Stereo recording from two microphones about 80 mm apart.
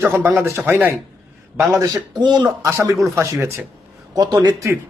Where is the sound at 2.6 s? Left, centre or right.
Right.